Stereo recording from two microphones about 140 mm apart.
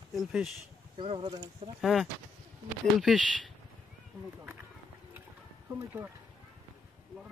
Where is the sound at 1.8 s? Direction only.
Centre (ahead or behind).